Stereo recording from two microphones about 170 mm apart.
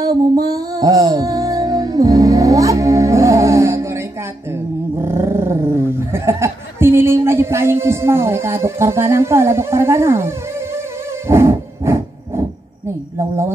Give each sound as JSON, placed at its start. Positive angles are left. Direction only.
{"t": 0.0, "sound": "music", "side_deg": -20}
{"t": 4.5, "sound": "speech", "side_deg": -15}
{"t": 11.2, "sound": "a sound", "side_deg": -15}